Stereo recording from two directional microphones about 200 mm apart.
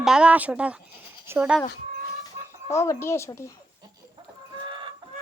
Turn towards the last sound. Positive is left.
turn(degrees=-20)  # may be behind; listen again after turning